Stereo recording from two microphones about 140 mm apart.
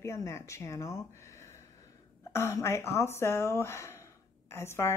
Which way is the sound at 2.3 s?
20° left (ahead or behind).